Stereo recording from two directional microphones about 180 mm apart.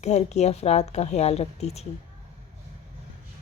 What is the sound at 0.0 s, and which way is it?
A woman's voice, 40° left (ahead or behind).